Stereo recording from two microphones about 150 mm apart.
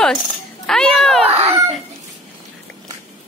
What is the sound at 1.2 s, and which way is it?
Speech, 40° right (ahead or behind).